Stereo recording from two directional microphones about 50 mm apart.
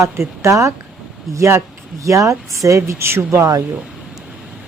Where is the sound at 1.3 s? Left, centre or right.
Right.